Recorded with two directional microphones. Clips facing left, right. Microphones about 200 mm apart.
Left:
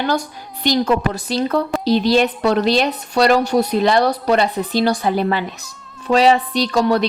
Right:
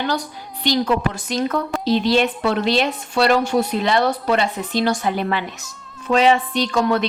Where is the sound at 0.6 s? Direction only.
45° left (ahead or behind).